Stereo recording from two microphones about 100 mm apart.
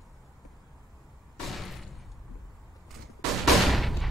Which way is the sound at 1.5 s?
Centre (ahead or behind).